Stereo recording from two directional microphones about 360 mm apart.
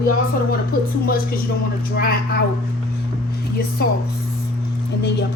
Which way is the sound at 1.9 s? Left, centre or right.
Left.